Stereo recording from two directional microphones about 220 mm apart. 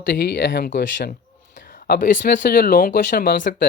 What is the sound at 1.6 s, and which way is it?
Whispering, 40° left (ahead or behind).